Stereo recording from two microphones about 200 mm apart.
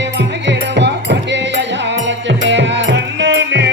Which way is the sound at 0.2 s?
60° right (ahead or behind).